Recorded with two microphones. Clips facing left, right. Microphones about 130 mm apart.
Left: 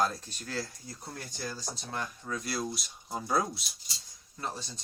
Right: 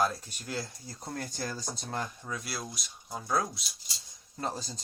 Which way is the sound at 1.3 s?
50° right (ahead or behind).